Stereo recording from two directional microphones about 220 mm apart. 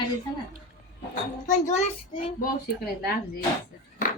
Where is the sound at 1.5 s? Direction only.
35° left (ahead or behind).